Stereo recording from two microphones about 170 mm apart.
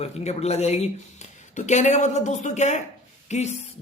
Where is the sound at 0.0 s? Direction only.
40° left (ahead or behind).